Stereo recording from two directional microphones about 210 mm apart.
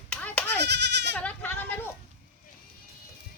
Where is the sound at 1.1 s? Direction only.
10° left (ahead or behind).